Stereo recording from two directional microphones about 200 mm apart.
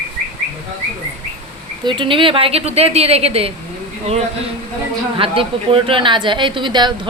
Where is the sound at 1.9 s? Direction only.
25° right (ahead or behind).